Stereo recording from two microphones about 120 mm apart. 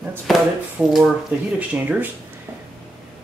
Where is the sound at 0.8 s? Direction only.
10° right (ahead or behind).